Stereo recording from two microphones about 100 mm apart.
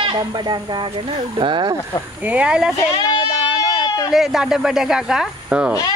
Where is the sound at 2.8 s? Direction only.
40° left (ahead or behind).